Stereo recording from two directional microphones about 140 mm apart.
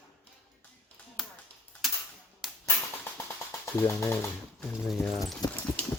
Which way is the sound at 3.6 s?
20° left (ahead or behind).